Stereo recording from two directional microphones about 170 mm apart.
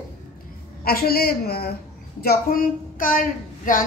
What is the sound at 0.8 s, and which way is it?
A woman's voice, 60° left (ahead or behind).